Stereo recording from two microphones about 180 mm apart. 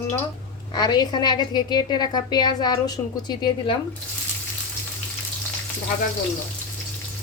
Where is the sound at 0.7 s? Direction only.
25° left (ahead or behind).